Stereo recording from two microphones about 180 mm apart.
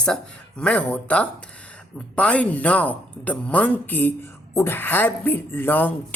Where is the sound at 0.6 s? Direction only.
5° left (ahead or behind).